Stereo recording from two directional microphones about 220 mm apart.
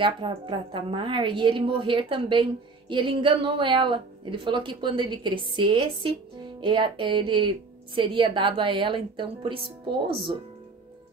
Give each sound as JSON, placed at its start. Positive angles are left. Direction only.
{"t": 0.0, "sound": "speech", "side_deg": -20}